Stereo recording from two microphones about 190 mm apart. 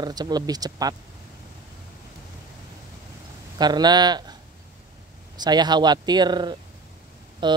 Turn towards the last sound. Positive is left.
turn(degrees=-25)  # may be behind; listen again after turning